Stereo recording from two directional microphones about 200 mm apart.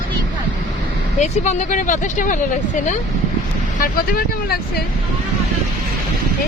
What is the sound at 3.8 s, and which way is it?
Speech, 50° left (ahead or behind).